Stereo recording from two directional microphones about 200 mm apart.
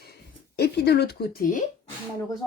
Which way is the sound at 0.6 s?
55° left (ahead or behind).